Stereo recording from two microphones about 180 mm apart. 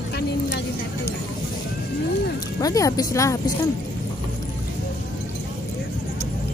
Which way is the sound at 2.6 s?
20° left (ahead or behind).